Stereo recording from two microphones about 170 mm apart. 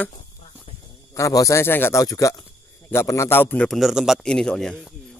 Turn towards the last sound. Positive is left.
turn(degrees=5)  # may be behind; listen again after turning